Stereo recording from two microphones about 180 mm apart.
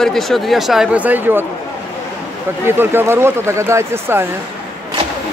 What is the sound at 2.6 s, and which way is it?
Speech, 10° right (ahead or behind).